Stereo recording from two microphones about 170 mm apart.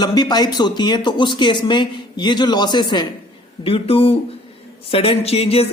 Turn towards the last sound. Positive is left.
turn(degrees=35)  # may be behind; listen again after turning